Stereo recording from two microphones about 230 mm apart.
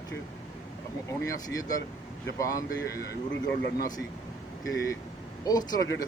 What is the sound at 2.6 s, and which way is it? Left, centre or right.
Speech, left.